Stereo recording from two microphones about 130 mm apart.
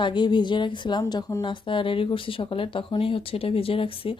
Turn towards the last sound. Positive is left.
turn(degrees=45)  # may be behind; listen again after turning